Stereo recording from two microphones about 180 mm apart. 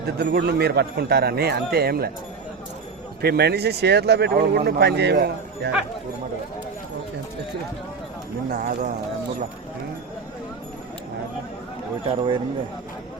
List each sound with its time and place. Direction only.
0.2 s speech: 65° right (ahead or behind)
3.2 s speech: 65° right (ahead or behind)
8.4 s speech: 45° right (ahead or behind)